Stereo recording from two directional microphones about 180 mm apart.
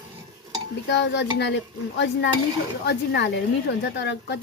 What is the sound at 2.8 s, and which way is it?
A woman's voice, 70° left (ahead or behind).